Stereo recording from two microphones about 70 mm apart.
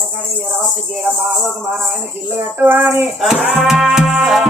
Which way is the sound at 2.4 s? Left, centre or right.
Right.